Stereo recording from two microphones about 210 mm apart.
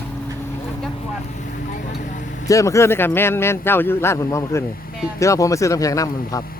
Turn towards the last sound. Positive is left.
turn(degrees=15)  # may be behind; listen again after turning